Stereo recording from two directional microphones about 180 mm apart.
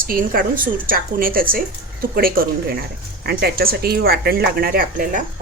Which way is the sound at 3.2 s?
60° right (ahead or behind).